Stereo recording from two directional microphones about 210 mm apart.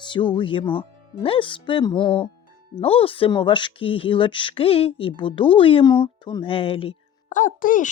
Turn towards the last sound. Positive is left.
turn(degrees=40)  # may be behind; listen again after turning